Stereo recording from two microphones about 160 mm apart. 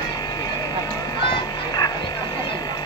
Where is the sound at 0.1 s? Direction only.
25° left (ahead or behind).